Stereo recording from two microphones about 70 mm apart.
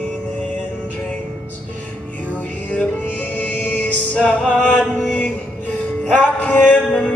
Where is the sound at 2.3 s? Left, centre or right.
Centre.